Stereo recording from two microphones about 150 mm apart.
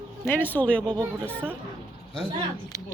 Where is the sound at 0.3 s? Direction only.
10° left (ahead or behind).